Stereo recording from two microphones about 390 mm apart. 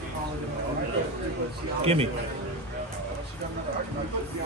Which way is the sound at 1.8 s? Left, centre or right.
Centre.